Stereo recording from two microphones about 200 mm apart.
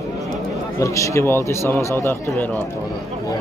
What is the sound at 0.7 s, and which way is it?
A man's voice, 15° left (ahead or behind).